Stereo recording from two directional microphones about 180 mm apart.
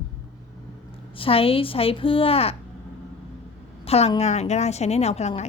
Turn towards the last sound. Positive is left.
turn(degrees=35)  # may be behind; listen again after turning